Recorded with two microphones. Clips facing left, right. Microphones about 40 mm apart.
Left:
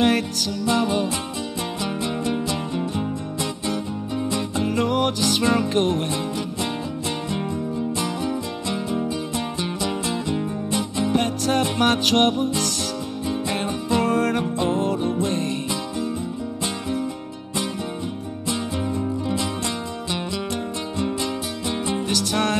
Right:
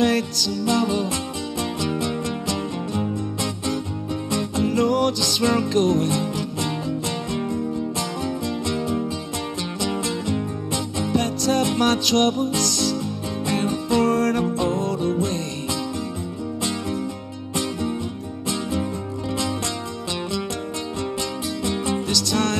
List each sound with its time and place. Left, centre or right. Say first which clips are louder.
0.0 s music: even; left
4.3 s music: right 3 dB; left
8.0 s music: left 1 dB; left
21.0 s music: left 3 dB; left